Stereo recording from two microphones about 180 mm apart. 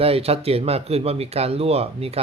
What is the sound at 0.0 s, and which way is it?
Speech, 35° right (ahead or behind).